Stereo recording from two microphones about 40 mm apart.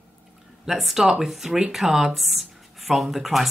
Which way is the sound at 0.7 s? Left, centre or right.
Centre.